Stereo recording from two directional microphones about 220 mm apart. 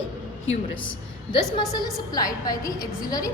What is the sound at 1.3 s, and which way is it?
A woman's voice, 20° left (ahead or behind).